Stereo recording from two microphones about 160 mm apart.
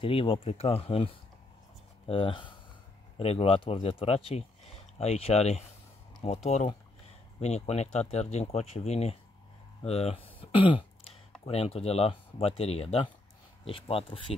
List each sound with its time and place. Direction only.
0.0 s speech: 35° left (ahead or behind)